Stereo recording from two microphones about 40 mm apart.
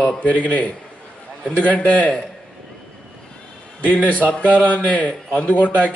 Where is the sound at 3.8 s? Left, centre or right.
Right.